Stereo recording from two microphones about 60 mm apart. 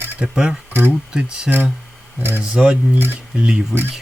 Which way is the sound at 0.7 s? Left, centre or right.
Right.